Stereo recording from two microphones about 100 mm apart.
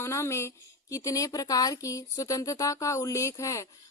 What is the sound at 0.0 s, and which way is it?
A woman's voice, 25° left (ahead or behind).